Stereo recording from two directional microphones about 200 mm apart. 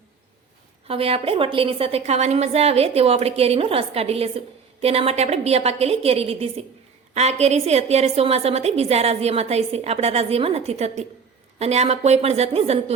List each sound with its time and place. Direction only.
0.9 s a woman's voice: 30° right (ahead or behind)